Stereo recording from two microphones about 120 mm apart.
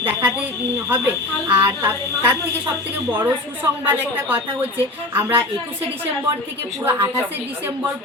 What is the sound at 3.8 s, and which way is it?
A woman's voice, 15° right (ahead or behind).